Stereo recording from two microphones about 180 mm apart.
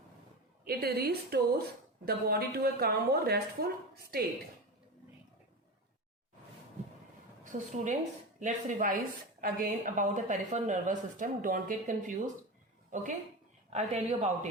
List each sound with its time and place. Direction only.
0.6 s speech: 60° right (ahead or behind)
7.4 s a woman's voice: 45° right (ahead or behind)
13.7 s speech: 35° right (ahead or behind)